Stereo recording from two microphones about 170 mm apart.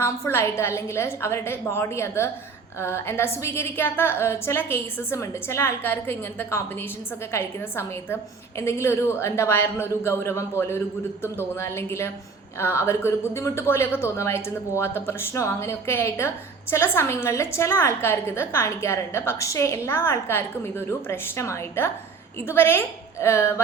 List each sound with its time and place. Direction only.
0.0 s a woman's voice: 15° left (ahead or behind)